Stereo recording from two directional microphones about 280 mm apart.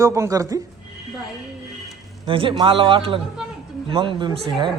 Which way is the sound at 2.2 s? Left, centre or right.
Centre.